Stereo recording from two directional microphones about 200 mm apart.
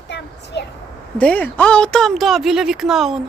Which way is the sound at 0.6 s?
60° left (ahead or behind).